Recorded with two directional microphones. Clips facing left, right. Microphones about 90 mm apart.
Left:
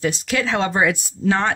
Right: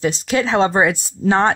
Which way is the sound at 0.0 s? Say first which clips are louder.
Right 3 dB; 30° right (ahead or behind).